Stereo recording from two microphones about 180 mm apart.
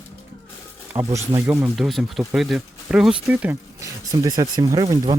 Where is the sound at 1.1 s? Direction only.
15° right (ahead or behind).